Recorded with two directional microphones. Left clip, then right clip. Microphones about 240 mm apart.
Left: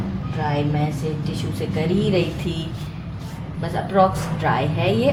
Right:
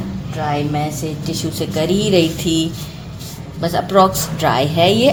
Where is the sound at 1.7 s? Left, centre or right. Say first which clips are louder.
Right 6 dB; right.